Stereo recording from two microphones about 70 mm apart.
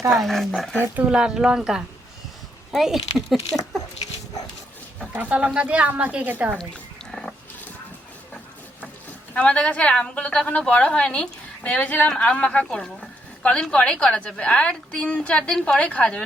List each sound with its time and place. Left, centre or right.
0.1 s speech: centre
0.9 s speech: centre
5.1 s a woman's voice: centre
7.1 s pig: centre
9.3 s speech: centre